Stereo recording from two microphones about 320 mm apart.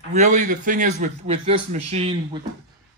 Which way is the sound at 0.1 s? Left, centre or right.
Right.